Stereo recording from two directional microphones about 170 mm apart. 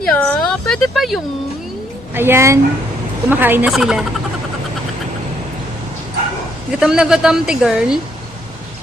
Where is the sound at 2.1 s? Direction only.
15° right (ahead or behind).